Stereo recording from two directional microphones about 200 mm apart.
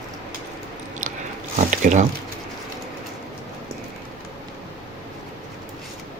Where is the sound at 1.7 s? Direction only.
35° right (ahead or behind).